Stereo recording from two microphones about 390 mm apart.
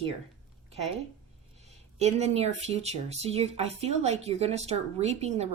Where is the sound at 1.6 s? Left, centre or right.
Centre.